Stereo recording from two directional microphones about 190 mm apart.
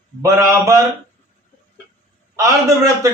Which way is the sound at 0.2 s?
15° right (ahead or behind).